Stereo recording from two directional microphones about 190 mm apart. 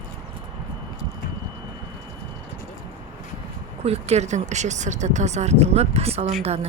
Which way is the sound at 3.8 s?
35° right (ahead or behind).